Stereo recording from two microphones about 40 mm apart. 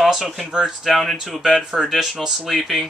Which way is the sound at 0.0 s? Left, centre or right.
Centre.